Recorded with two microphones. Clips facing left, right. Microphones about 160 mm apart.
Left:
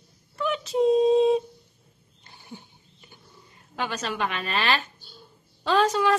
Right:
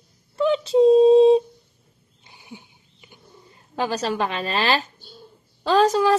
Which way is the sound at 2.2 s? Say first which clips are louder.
Right 1 dB; 15° right (ahead or behind).